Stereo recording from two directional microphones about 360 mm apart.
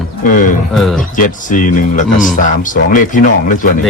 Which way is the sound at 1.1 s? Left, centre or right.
Left.